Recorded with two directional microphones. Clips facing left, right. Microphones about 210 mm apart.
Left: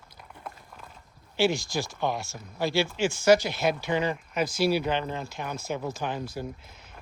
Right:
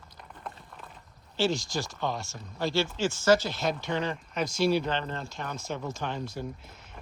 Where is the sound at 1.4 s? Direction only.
10° left (ahead or behind).